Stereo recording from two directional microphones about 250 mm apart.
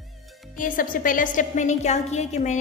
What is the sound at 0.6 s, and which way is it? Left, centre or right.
A woman's voice, left.